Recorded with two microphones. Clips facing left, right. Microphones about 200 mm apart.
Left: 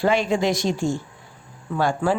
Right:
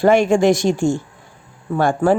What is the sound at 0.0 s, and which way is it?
Speech, 50° right (ahead or behind).